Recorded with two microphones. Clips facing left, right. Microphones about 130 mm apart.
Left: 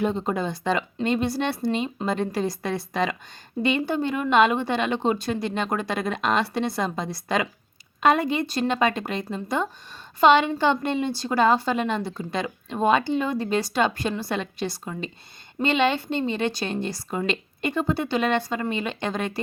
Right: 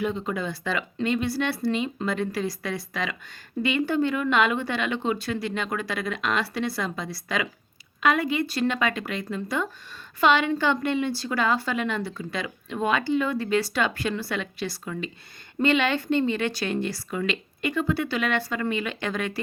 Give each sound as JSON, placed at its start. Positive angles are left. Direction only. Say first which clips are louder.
{"t": 0.0, "sound": "speech", "louder": "left 3 dB", "side_deg": 35}
{"t": 0.4, "sound": "speech", "louder": "left 4 dB", "side_deg": 25}
{"t": 11.3, "sound": "speech", "louder": "left 8 dB", "side_deg": 30}